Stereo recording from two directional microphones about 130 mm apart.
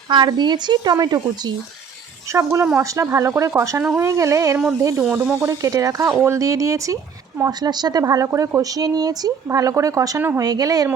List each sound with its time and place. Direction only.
0.1 s speech: 35° right (ahead or behind)
2.3 s speech: 20° right (ahead or behind)
5.5 s speech: 25° right (ahead or behind)